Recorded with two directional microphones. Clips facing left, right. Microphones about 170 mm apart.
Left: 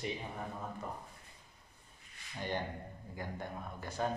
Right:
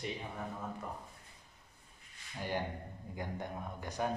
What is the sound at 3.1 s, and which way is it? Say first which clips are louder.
Speech: right 2 dB; 15° right (ahead or behind).